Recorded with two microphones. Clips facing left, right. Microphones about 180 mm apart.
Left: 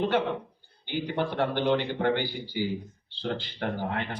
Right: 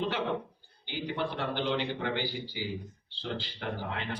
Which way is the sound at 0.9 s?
55° left (ahead or behind).